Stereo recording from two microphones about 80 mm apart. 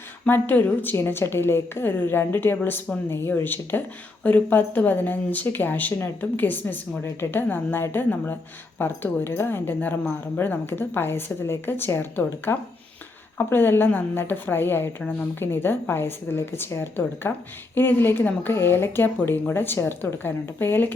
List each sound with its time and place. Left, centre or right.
0.3 s a woman's voice: left